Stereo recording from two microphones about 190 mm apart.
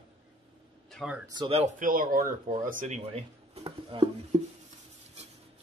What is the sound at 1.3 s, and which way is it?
Speech, 30° right (ahead or behind).